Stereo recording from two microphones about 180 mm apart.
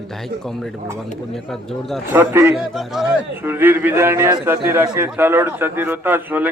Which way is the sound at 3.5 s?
10° right (ahead or behind).